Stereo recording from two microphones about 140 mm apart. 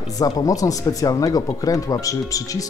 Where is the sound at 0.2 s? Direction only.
25° left (ahead or behind).